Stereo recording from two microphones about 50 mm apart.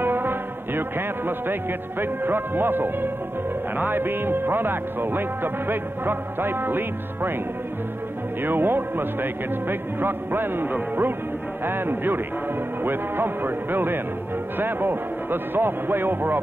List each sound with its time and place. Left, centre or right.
0.0 s music: right
3.7 s a man's voice: right
8.4 s a man's voice: right